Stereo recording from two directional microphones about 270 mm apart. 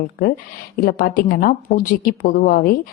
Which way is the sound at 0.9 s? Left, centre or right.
Left.